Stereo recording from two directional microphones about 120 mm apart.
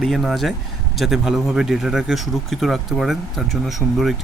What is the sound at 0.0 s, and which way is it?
Speech, centre (ahead or behind).